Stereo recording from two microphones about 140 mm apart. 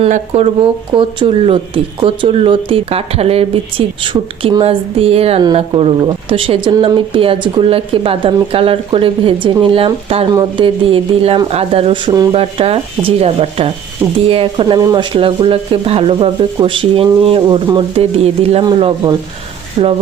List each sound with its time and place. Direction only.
0.1 s speech: 50° right (ahead or behind); by 12.3 s 30° right (ahead or behind)
12.3 s speech: 45° right (ahead or behind)